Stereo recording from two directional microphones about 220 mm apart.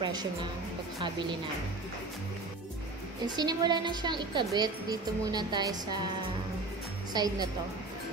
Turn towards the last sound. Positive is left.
turn(degrees=-20)  # may be behind; listen again after turning